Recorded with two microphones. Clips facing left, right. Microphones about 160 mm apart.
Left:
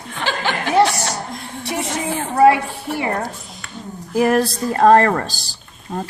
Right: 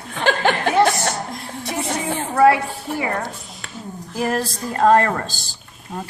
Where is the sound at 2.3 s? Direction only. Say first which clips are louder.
Left 2 dB; 25° left (ahead or behind).